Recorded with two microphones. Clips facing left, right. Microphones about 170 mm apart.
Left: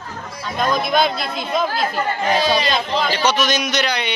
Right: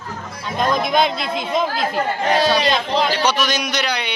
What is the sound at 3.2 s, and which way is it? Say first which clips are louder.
Speech: left 1 dB; 10° right (ahead or behind).